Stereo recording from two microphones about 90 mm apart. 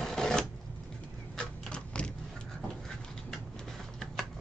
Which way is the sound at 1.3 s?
10° left (ahead or behind).